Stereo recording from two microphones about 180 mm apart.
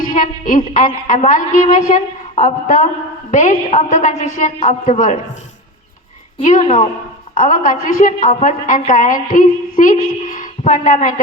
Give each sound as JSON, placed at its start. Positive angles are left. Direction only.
{"t": 0.1, "sound": "a woman's voice", "side_deg": 45}
{"t": 6.4, "sound": "a woman's voice", "side_deg": 45}